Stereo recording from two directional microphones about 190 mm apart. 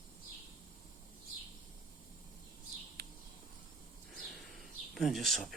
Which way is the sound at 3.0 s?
55° right (ahead or behind).